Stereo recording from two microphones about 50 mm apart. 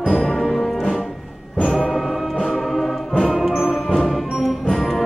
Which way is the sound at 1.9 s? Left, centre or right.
Centre.